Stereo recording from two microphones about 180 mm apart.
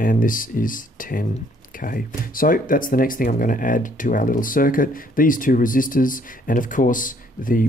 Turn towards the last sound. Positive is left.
turn(degrees=50)  # may be behind; listen again after turning